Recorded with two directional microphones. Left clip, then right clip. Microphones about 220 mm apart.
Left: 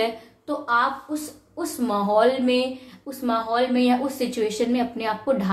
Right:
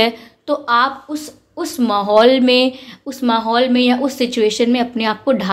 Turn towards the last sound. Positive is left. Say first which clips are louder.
# right 7 dB
turn(degrees=-35)  # may be behind; listen again after turning